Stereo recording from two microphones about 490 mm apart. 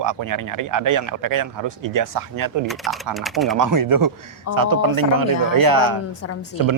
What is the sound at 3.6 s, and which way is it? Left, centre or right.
Speech, right.